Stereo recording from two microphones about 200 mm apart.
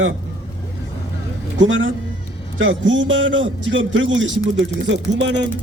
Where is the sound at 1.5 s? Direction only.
75° right (ahead or behind).